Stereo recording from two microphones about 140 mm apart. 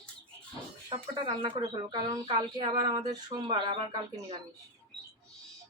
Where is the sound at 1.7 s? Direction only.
30° right (ahead or behind).